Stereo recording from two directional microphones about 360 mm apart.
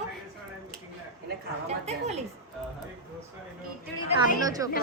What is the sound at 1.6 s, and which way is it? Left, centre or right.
Speech, centre.